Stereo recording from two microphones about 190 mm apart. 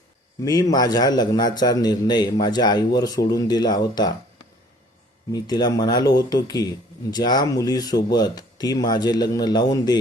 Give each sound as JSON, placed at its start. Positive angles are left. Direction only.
{"t": 0.4, "sound": "speech", "side_deg": 20}
{"t": 5.3, "sound": "speech", "side_deg": 20}